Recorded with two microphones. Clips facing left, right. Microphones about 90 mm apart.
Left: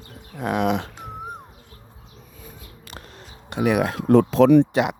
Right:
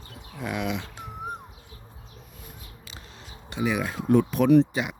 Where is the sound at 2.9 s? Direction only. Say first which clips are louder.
Left 6 dB; 55° left (ahead or behind); by 4.9 s 85° left.